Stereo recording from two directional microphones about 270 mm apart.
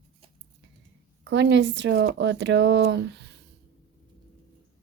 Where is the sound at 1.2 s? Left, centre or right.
Right.